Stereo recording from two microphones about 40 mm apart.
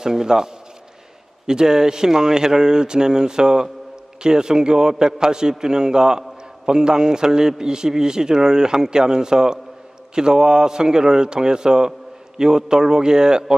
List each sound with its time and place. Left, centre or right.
0.0 s a man's voice: centre